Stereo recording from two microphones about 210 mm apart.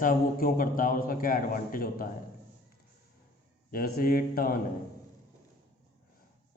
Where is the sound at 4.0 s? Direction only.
45° left (ahead or behind).